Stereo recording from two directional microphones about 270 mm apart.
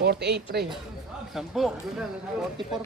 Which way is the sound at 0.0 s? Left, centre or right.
Right.